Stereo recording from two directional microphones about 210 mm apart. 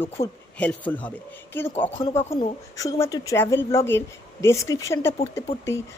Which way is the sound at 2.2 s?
25° left (ahead or behind).